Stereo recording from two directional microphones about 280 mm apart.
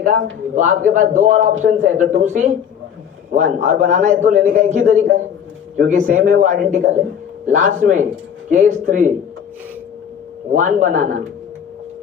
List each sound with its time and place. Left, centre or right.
0.5 s a man's voice: right
10.5 s a man's voice: right